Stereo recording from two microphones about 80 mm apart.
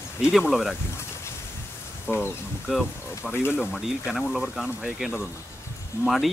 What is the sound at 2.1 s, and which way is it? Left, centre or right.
Speech, left.